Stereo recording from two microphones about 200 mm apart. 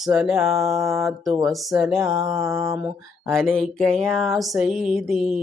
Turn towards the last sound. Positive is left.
turn(degrees=0)  # may be behind; listen again after turning